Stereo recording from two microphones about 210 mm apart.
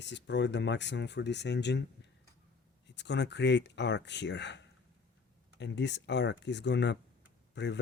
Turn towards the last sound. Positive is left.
turn(degrees=55)  # may be behind; listen again after turning